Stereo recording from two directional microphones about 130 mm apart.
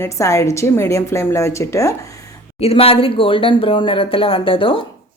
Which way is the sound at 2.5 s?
50° left (ahead or behind).